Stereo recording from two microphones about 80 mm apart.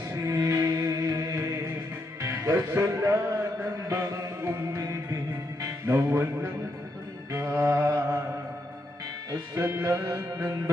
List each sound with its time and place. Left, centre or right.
0.1 s music: right
2.2 s speech: right
3.8 s music: right
7.3 s mantra: right
9.6 s music: right